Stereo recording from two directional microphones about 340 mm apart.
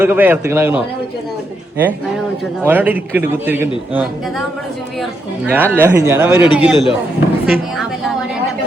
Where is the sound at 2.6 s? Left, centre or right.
Centre.